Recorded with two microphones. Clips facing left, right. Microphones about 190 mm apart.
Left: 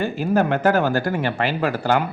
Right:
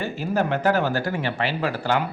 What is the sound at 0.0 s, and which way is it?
Speech, 50° left (ahead or behind).